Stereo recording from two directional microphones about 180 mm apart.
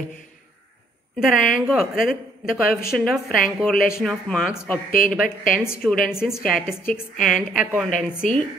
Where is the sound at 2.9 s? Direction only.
5° left (ahead or behind).